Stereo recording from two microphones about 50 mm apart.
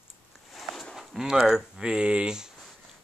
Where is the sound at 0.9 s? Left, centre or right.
Centre.